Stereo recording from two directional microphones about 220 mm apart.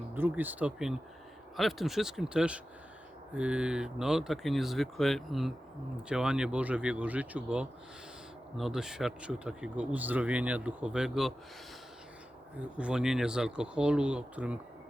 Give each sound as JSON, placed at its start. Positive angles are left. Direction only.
{"t": 0.1, "sound": "speech", "side_deg": -10}
{"t": 12.5, "sound": "speech", "side_deg": -5}